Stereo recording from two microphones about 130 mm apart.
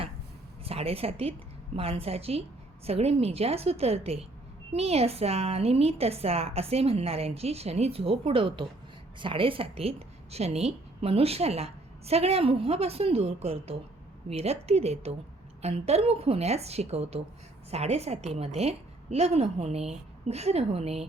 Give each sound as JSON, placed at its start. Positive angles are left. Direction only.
{"t": 0.6, "sound": "a woman's voice", "side_deg": -50}